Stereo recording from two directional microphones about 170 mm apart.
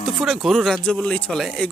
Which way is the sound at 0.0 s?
Centre (ahead or behind).